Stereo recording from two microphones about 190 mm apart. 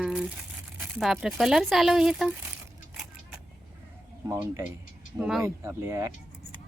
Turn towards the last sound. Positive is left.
turn(degrees=-15)  # may be behind; listen again after turning